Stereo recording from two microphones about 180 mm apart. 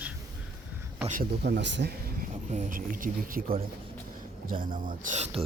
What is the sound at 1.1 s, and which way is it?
Speech, 55° right (ahead or behind).